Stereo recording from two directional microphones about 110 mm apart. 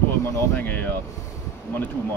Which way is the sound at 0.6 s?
15° left (ahead or behind).